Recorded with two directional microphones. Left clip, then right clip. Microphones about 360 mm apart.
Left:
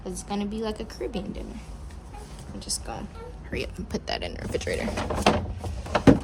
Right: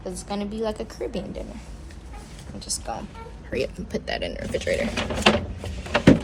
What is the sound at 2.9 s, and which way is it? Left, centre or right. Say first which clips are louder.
A woman's voice: right 4 dB; centre.